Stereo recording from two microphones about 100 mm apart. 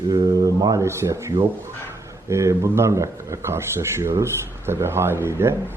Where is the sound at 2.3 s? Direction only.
30° right (ahead or behind).